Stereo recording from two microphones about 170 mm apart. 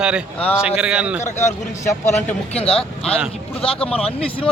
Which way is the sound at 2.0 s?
40° left (ahead or behind).